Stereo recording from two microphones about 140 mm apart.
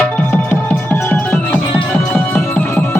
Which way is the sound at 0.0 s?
10° left (ahead or behind).